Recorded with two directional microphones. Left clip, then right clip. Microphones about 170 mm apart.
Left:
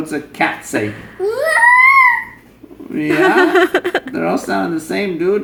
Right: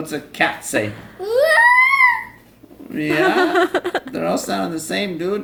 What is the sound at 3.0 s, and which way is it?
A woman's voice, 15° right (ahead or behind).